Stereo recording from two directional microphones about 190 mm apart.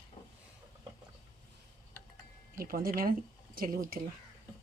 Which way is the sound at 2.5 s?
50° right (ahead or behind).